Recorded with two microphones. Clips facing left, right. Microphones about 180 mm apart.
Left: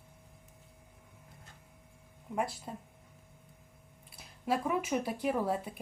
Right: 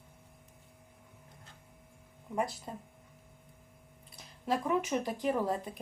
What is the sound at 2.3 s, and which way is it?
Speech, centre (ahead or behind).